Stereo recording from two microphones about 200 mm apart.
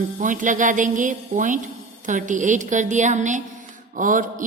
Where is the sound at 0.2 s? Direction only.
40° right (ahead or behind).